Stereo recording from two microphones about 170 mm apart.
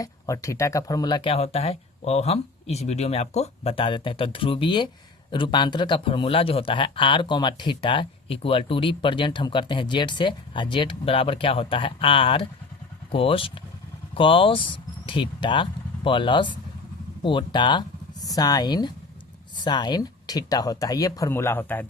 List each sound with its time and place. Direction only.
0.0 s speech: 20° left (ahead or behind)